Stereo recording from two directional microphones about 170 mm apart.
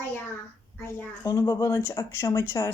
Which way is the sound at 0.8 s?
15° left (ahead or behind).